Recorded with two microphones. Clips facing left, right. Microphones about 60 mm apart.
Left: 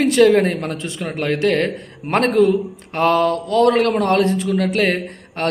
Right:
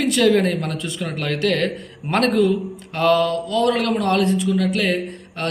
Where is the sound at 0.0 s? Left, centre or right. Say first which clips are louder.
Left 4 dB; left.